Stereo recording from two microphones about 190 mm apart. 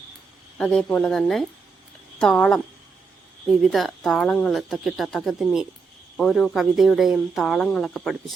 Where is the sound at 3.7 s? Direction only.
Centre (ahead or behind).